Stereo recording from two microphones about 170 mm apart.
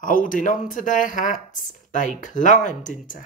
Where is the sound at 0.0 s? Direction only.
50° left (ahead or behind).